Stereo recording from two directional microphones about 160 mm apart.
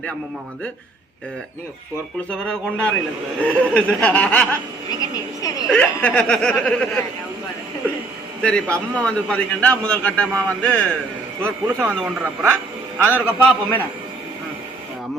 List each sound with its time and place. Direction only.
2.4 s a man's voice: 5° left (ahead or behind)
4.9 s a woman's voice: 20° left (ahead or behind)
5.7 s a man's voice: 5° left (ahead or behind)
8.4 s a man's voice: 5° left (ahead or behind)
11.4 s a man's voice: 10° right (ahead or behind)
13.1 s a man's voice: 10° left (ahead or behind)